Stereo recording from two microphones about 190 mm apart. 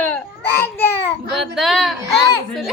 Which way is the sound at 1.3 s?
Centre (ahead or behind).